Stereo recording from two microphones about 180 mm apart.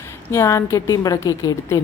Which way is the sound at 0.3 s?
15° left (ahead or behind).